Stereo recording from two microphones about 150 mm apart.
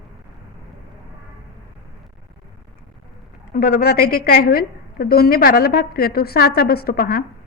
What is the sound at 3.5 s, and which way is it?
A woman's voice, 90° left.